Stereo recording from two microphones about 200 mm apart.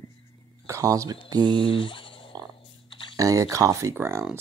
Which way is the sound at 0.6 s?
15° right (ahead or behind).